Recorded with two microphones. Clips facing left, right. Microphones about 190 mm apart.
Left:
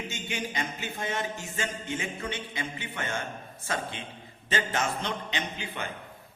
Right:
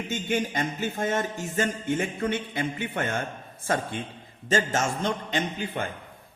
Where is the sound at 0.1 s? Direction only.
50° right (ahead or behind).